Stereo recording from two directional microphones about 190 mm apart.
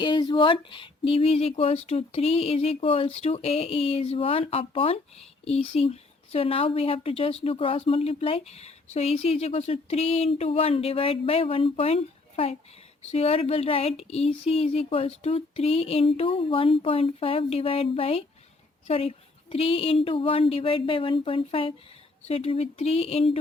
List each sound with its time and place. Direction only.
0.0 s a woman's voice: 25° left (ahead or behind)